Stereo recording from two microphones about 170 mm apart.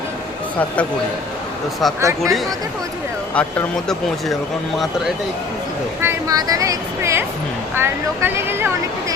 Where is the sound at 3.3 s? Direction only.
5° left (ahead or behind).